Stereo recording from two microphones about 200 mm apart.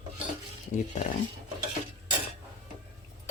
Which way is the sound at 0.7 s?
35° left (ahead or behind).